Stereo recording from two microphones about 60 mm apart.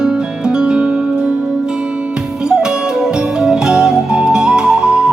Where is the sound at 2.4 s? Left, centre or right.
Centre.